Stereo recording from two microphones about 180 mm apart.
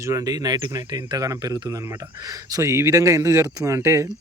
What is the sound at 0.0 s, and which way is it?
Speech, 20° right (ahead or behind).